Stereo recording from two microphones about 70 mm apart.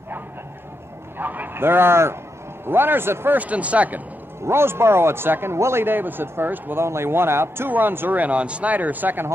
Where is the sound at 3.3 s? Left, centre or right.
Centre.